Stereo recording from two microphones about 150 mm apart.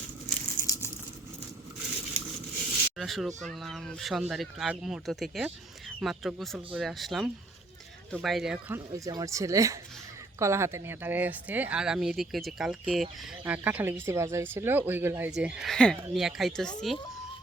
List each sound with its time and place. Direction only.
0.6 s crumpling: 20° left (ahead or behind)
3.0 s speech: centre (ahead or behind)
8.7 s speech: 25° right (ahead or behind); by 17.0 s centre (ahead or behind)